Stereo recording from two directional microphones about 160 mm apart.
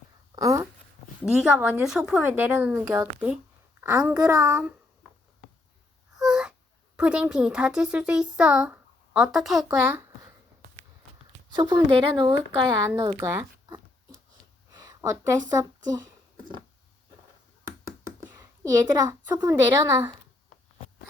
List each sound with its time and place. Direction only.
0.3 s speech: 20° right (ahead or behind)
1.2 s speech: 5° right (ahead or behind)
2.9 s speech: 20° right (ahead or behind)
6.1 s a sound: 5° right (ahead or behind)
6.9 s speech: 5° right (ahead or behind)
9.8 s a sound: 15° right (ahead or behind)
11.5 s speech: 25° right (ahead or behind)
14.7 s a sound: 25° right (ahead or behind)
15.4 s speech: 25° right (ahead or behind)
17.7 s knock: 20° right (ahead or behind)
19.3 s speech: 20° right (ahead or behind)